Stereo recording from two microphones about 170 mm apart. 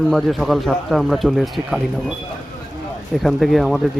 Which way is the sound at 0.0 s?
Centre (ahead or behind).